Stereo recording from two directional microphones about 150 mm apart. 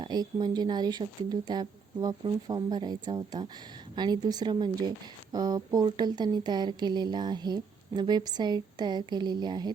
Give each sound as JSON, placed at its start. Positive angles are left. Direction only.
{"t": 0.0, "sound": "speech", "side_deg": -30}